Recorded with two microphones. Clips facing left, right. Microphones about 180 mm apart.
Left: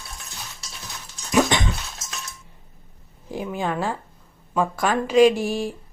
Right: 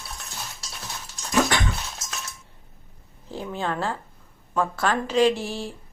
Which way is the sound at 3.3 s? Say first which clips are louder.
Left 3 dB; 15° left (ahead or behind).